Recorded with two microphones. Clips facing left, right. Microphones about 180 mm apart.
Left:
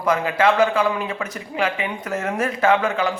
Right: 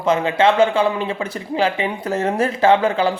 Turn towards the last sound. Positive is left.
turn(degrees=-30)  # may be behind; listen again after turning